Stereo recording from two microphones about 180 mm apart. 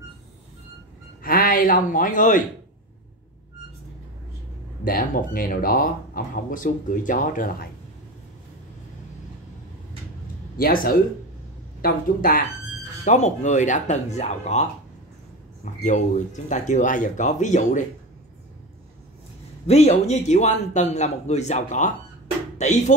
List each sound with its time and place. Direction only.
1.2 s speech: 50° left (ahead or behind)
4.8 s speech: 50° left (ahead or behind)
10.6 s speech: 55° left (ahead or behind)
13.0 s a man's voice: 40° left (ahead or behind)
19.7 s a man's voice: 35° left (ahead or behind)